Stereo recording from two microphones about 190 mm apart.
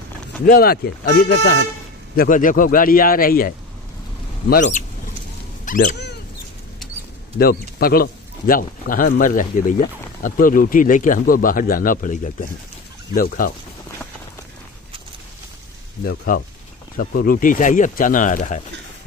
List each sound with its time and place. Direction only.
0.5 s speech: 55° left (ahead or behind)
2.1 s speech: 45° left (ahead or behind)
5.7 s a sound: 45° left (ahead or behind)
7.3 s speech: 50° left (ahead or behind)
16.1 s speech: 55° left (ahead or behind)